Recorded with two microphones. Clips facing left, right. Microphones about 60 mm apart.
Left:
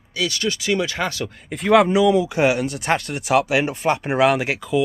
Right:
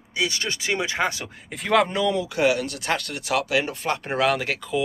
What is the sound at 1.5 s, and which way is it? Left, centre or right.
Speech, centre.